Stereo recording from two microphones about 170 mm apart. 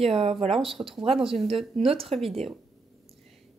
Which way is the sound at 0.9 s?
30° right (ahead or behind).